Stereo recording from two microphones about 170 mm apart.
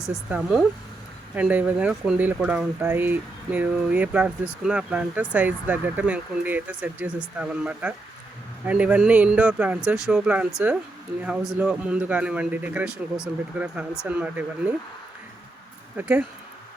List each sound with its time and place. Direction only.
0.0 s speech: 5° right (ahead or behind)
16.0 s speech: 10° right (ahead or behind)